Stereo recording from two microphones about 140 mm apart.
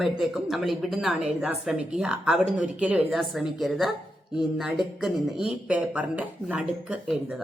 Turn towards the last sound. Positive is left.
turn(degrees=-5)  # may be behind; listen again after turning